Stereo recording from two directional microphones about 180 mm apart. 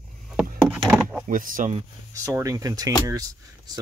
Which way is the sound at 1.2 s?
50° right (ahead or behind).